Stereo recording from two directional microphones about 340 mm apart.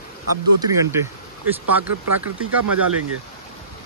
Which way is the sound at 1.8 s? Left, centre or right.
Centre.